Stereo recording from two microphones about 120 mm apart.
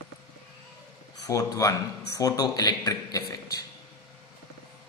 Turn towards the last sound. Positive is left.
turn(degrees=30)  # may be behind; listen again after turning